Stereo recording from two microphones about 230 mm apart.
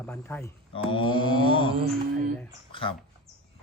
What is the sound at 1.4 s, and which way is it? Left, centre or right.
Speech, left.